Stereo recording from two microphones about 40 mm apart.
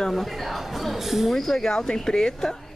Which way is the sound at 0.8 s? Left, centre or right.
Centre.